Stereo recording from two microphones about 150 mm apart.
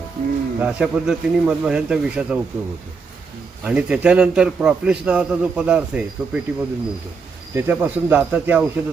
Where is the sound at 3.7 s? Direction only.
5° right (ahead or behind).